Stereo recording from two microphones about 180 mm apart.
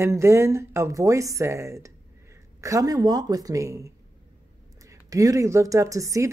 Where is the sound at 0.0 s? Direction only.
15° right (ahead or behind).